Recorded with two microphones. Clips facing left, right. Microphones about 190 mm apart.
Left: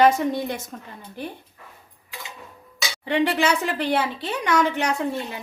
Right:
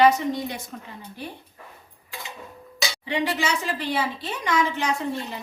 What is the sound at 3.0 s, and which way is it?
Speech, 55° left (ahead or behind).